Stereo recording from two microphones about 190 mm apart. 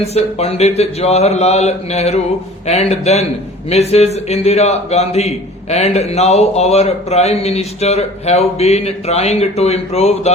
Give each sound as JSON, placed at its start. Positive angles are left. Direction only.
{"t": 0.0, "sound": "a man's voice", "side_deg": 35}